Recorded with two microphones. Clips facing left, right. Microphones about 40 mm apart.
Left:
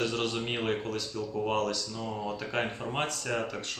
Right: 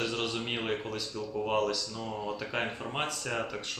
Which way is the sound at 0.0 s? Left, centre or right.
Centre.